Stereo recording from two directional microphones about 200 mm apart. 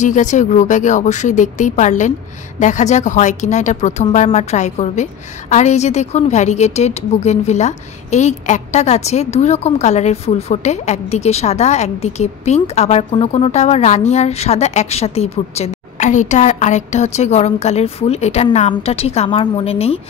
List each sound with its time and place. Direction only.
0.0 s a woman's voice: 40° left (ahead or behind)